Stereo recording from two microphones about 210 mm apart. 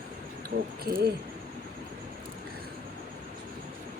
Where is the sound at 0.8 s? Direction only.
45° right (ahead or behind).